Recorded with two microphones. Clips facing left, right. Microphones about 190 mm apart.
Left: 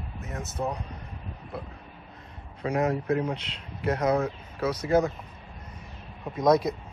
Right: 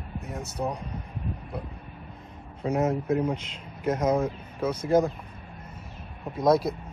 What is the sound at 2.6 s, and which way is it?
Speech, 5° right (ahead or behind).